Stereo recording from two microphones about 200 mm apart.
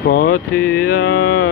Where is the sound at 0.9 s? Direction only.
50° left (ahead or behind).